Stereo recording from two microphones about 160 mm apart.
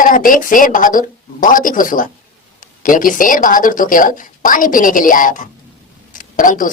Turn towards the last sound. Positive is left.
turn(degrees=55)  # may be behind; listen again after turning